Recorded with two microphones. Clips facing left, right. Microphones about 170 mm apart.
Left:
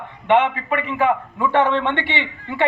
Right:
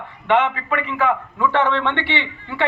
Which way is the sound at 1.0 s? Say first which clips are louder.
Even; 10° left (ahead or behind).